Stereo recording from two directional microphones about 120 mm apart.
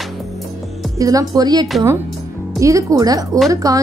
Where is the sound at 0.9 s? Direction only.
30° right (ahead or behind).